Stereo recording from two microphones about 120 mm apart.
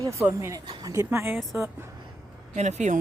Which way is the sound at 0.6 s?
40° right (ahead or behind).